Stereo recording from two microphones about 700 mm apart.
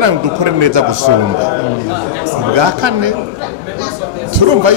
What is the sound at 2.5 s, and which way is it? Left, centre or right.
Speech, right.